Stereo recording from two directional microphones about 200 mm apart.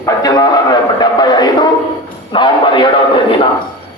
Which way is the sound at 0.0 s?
20° left (ahead or behind).